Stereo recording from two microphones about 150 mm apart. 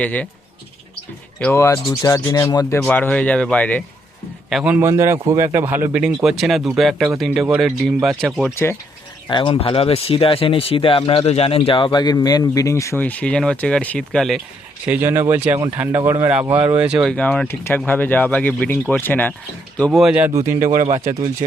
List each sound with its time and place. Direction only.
0.0 s speech: 10° left (ahead or behind)
1.4 s speech: 15° left (ahead or behind)
2.8 s speech: 10° left (ahead or behind)
4.4 s a man's voice: 5° right (ahead or behind)
6.2 s speech: centre (ahead or behind)
9.3 s speech: 35° left (ahead or behind); by 14.4 s centre (ahead or behind)
14.8 s a man's voice: 15° right (ahead or behind)
17.1 s speech: 5° left (ahead or behind)
19.8 s speech: centre (ahead or behind)
20.2 s a man's voice: 20° right (ahead or behind)